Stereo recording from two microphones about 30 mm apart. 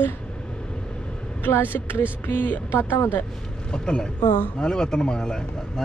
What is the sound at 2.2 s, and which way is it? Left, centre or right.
Speech, left.